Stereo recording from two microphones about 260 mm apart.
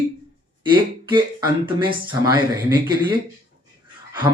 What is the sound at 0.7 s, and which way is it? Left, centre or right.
Speech, centre.